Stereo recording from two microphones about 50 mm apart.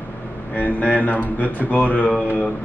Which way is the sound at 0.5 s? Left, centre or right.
Left.